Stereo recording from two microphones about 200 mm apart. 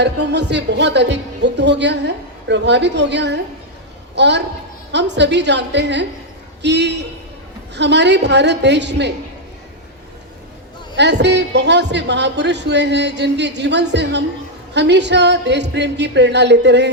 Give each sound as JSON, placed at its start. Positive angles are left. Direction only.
{"t": 0.0, "sound": "speech", "side_deg": -60}
{"t": 10.9, "sound": "speech", "side_deg": -60}